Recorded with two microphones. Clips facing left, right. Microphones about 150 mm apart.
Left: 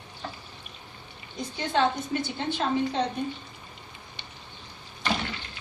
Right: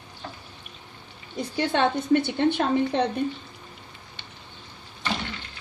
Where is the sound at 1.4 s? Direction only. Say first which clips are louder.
Right 3 dB; 60° right (ahead or behind).